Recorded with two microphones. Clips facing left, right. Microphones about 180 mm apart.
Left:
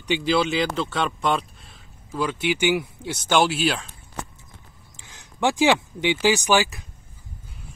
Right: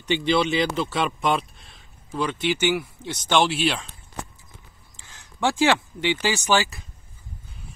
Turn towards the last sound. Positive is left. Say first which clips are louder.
# left 3 dB
turn(degrees=15)  # may be behind; listen again after turning